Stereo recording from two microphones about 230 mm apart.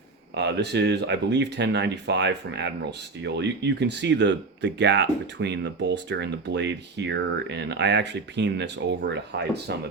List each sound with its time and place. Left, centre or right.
0.3 s speech: right